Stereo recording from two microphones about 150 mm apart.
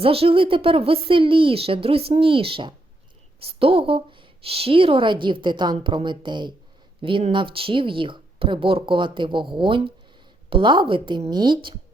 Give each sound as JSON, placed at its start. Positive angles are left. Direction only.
{"t": 0.0, "sound": "a woman's voice", "side_deg": -40}